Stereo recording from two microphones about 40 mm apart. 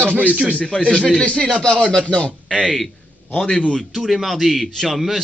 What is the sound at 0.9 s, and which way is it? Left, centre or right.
Speech, left.